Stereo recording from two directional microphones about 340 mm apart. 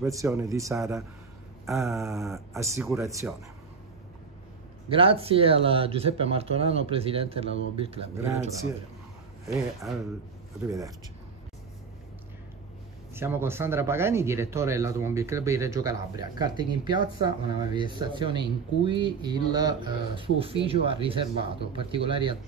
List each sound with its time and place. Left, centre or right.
0.0 s speech: centre
4.8 s speech: centre
9.5 s speech: centre
13.1 s speech: centre